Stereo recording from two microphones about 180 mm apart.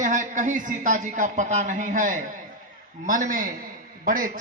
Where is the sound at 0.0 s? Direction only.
45° right (ahead or behind).